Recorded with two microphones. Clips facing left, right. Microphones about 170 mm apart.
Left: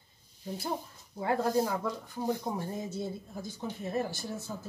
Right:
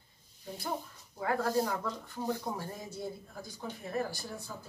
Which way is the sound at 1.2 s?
20° left (ahead or behind).